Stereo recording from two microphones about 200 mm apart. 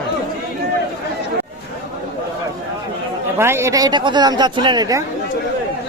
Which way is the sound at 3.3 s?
10° right (ahead or behind).